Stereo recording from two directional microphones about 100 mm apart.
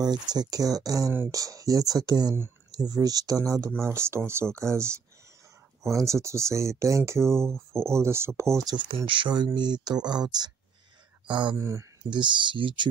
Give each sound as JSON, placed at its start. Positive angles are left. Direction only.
{"t": 0.0, "sound": "speech", "side_deg": -45}
{"t": 5.9, "sound": "speech", "side_deg": -30}
{"t": 8.8, "sound": "speech", "side_deg": -60}
{"t": 11.5, "sound": "speech", "side_deg": -30}
{"t": 12.0, "sound": "speech", "side_deg": -50}